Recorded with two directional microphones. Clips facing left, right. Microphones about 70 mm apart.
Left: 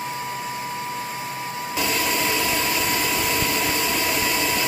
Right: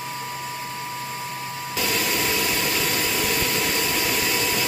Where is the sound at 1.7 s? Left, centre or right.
Left.